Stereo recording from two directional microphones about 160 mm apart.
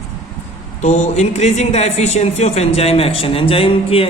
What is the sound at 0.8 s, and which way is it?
A man's voice, 45° left (ahead or behind).